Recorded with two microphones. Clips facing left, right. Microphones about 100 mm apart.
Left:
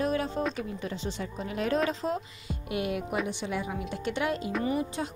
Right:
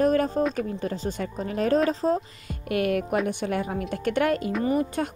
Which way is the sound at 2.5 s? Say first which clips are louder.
Right 6 dB; 55° right (ahead or behind).